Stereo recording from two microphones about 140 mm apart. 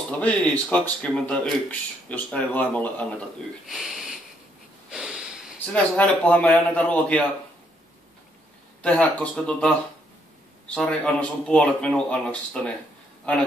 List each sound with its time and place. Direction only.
0.2 s speech: 10° left (ahead or behind)
3.6 s speech: centre (ahead or behind)
4.9 s a sound: 5° right (ahead or behind)
5.7 s speech: 10° left (ahead or behind)
8.8 s speech: 10° left (ahead or behind)
10.7 s speech: 5° left (ahead or behind)